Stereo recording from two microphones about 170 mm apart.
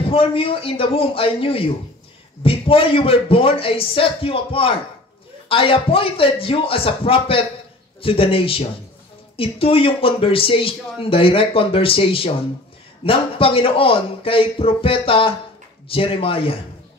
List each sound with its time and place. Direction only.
0.1 s a man's voice: 35° left (ahead or behind)